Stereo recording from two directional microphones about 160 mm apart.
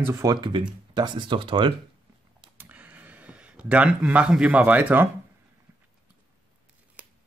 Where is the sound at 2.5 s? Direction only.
10° right (ahead or behind).